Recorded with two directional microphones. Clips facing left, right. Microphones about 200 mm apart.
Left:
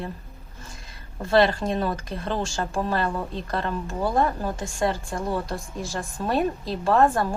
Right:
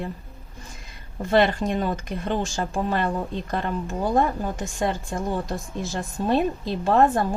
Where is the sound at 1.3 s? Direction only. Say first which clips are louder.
Even; 20° right (ahead or behind).